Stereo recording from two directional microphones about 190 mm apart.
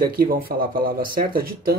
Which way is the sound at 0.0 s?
50° right (ahead or behind).